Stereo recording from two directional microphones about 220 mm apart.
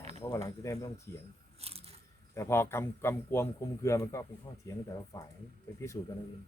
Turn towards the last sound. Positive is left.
turn(degrees=10)  # may be behind; listen again after turning